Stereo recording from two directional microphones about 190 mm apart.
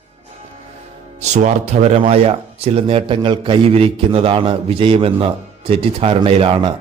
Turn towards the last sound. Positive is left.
turn(degrees=-25)  # may be behind; listen again after turning